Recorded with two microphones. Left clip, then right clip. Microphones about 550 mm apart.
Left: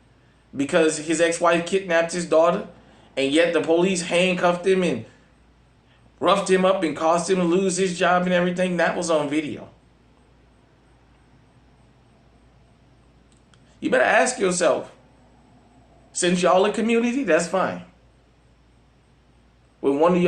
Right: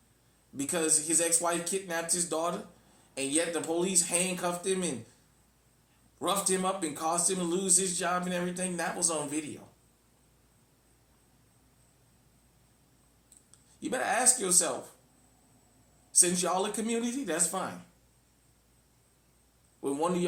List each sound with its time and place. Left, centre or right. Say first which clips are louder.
0.6 s a man's voice: left 11 dB; right
6.1 s a man's voice: left 12 dB; right
13.8 s a man's voice: left 11 dB; right
16.2 s a man's voice: left 13 dB; right